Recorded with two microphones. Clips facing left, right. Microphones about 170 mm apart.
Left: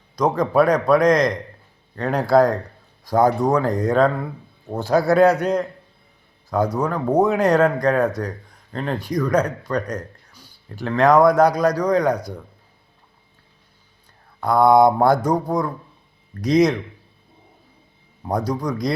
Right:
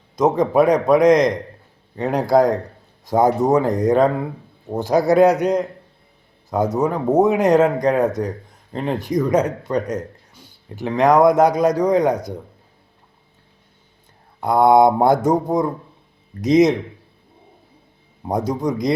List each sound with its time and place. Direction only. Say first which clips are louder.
0.2 s speech: right 2 dB; 20° right (ahead or behind)
14.4 s speech: right 1 dB; 20° right (ahead or behind)
18.2 s speech: right 2 dB; 20° right (ahead or behind)